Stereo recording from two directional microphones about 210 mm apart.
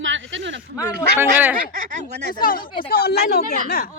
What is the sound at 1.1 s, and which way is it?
Speech, 10° right (ahead or behind).